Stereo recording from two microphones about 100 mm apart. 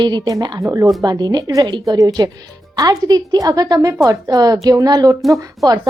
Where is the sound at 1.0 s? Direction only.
45° right (ahead or behind).